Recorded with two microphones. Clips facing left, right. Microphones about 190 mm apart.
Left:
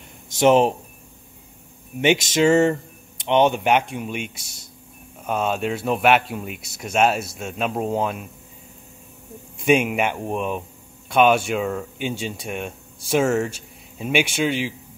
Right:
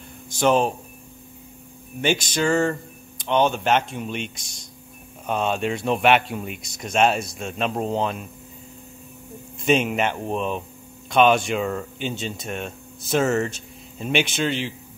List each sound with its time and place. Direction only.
0.3 s speech: 20° left (ahead or behind)
2.0 s speech: 20° left (ahead or behind)
9.6 s speech: 10° left (ahead or behind)